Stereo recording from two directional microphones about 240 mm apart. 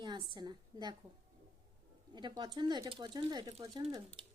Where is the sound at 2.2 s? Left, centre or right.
Centre.